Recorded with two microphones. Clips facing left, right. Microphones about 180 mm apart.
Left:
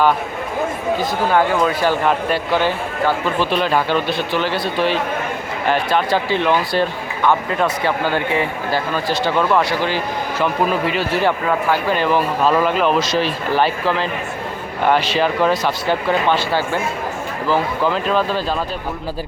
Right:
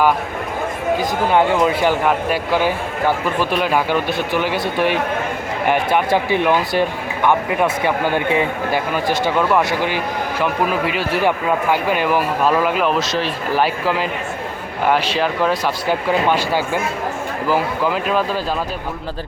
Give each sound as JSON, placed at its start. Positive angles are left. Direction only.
{"t": 1.3, "sound": "speech", "side_deg": -20}
{"t": 9.4, "sound": "speech", "side_deg": -5}
{"t": 15.2, "sound": "speech", "side_deg": 0}